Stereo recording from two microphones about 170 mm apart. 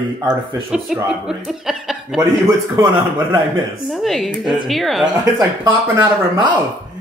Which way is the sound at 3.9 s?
Centre (ahead or behind).